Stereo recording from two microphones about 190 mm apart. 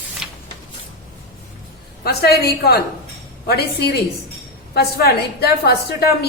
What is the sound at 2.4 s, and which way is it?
A woman's voice, 55° left (ahead or behind).